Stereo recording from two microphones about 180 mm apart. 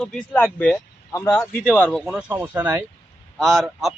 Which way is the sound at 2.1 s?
10° right (ahead or behind).